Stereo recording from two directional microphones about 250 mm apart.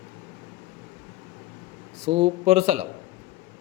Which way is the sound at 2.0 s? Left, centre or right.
Right.